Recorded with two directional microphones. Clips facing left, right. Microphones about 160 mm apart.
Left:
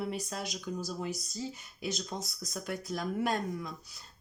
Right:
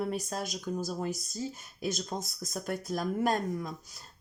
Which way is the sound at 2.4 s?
45° right (ahead or behind).